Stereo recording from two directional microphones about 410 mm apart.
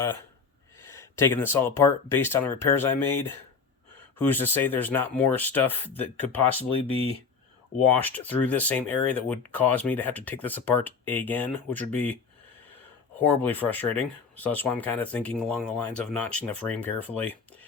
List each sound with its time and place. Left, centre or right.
0.8 s speech: centre
7.9 s speech: centre